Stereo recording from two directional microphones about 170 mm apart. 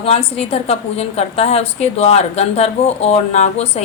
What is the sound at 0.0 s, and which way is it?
A woman's voice, 35° left (ahead or behind).